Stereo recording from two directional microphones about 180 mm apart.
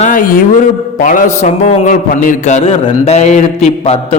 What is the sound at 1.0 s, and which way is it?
Mantra, 50° left (ahead or behind).